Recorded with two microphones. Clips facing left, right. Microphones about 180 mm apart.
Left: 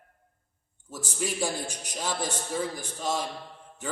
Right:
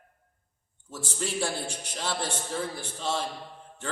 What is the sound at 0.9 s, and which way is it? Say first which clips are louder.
A man's voice: even; 10° left (ahead or behind).